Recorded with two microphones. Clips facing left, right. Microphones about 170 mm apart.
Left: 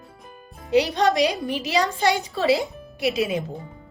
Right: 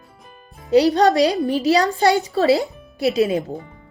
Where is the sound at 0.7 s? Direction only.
35° right (ahead or behind).